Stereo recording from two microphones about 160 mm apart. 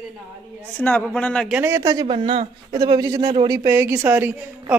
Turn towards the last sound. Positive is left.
turn(degrees=-10)  # may be behind; listen again after turning